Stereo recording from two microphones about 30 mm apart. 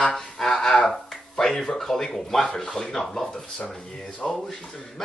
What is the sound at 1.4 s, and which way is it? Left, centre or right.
Speech, centre.